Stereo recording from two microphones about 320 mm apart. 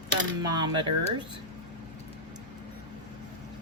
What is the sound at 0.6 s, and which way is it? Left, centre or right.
Speech, centre.